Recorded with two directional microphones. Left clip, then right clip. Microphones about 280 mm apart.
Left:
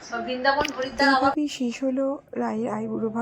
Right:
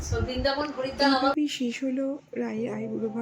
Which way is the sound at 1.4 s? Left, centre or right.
Centre.